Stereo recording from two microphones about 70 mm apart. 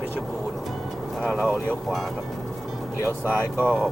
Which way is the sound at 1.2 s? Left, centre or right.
Centre.